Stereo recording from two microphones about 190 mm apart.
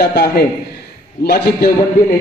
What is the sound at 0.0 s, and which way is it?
Speech, 55° left (ahead or behind).